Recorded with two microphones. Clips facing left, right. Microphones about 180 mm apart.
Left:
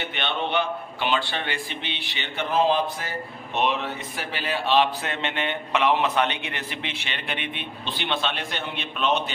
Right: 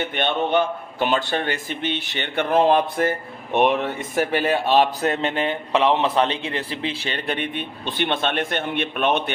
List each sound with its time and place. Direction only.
0.0 s speech: 45° right (ahead or behind)